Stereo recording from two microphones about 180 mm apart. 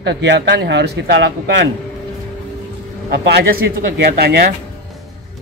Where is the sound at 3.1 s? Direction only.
65° right (ahead or behind).